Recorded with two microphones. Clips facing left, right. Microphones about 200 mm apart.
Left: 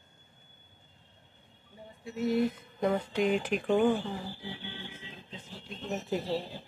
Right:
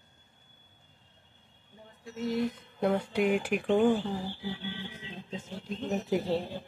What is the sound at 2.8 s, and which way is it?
Speech, 10° right (ahead or behind).